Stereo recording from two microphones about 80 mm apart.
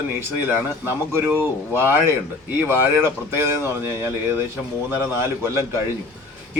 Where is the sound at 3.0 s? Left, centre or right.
Right.